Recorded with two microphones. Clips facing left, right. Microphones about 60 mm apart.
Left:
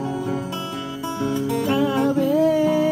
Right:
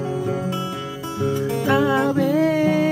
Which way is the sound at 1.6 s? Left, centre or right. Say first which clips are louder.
Right 3 dB; right.